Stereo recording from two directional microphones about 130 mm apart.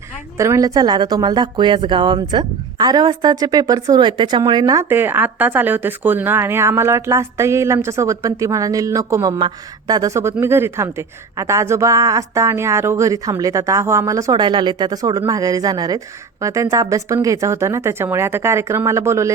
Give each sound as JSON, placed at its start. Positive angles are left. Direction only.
{"t": 0.3, "sound": "a woman's voice", "side_deg": -20}
{"t": 4.9, "sound": "a woman's voice", "side_deg": -15}
{"t": 14.4, "sound": "a woman's voice", "side_deg": -35}